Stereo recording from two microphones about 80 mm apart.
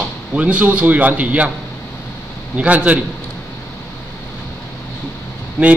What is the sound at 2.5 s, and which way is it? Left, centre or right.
Speech, centre.